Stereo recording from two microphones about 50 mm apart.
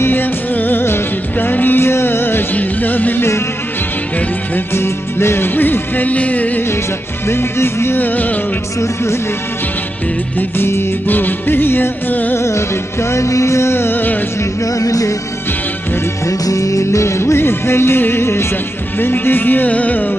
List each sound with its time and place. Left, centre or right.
0.0 s music: left
2.5 s music: left
4.6 s music: left
5.5 s music: left
7.2 s music: left
8.8 s music: left
11.1 s music: left
12.4 s music: left
14.4 s music: left
16.3 s music: left
18.9 s music: left